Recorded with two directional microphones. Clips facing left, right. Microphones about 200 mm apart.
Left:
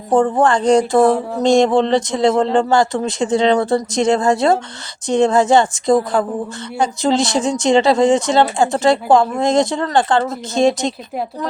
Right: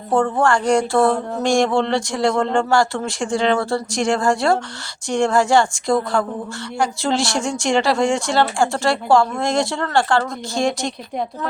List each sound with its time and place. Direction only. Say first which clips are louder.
0.1 s speech: left 3 dB; 15° left (ahead or behind)